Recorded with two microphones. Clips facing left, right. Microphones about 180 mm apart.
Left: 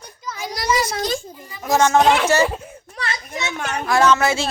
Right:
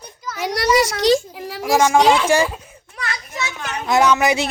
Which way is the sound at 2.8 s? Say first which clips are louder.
Right 2 dB; 30° left (ahead or behind).